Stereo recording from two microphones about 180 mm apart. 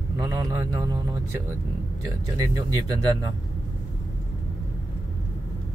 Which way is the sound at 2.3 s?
20° right (ahead or behind).